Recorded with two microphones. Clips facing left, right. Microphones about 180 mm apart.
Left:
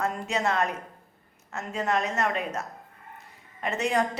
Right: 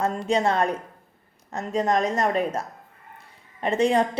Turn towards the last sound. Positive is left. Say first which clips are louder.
# right 6 dB
turn(degrees=-30)  # may be behind; listen again after turning